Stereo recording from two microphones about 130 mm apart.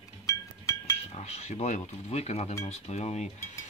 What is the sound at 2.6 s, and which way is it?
Cutlery, 55° left (ahead or behind).